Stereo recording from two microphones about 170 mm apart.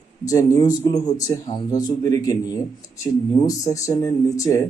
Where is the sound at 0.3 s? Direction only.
20° left (ahead or behind).